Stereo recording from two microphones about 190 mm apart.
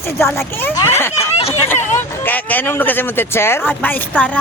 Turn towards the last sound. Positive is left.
turn(degrees=10)  # may be behind; listen again after turning